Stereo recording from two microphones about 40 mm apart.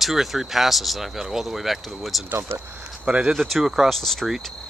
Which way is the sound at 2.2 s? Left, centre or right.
Right.